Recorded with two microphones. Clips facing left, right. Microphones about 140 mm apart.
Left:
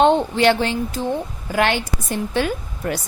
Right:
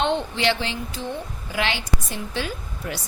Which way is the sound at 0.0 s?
45° left (ahead or behind).